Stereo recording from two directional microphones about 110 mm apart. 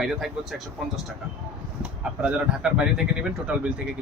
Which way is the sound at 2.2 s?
10° right (ahead or behind).